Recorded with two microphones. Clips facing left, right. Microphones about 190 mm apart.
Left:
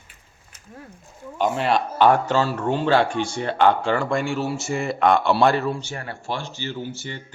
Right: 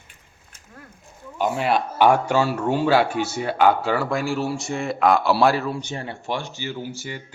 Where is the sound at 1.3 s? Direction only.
5° right (ahead or behind).